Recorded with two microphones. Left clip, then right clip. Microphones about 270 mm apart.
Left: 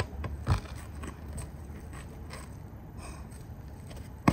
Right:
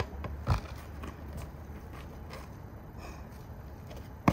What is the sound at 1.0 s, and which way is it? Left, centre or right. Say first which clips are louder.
Vehicle: left 2 dB; left.